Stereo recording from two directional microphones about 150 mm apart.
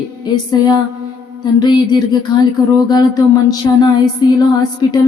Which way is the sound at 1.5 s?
30° left (ahead or behind).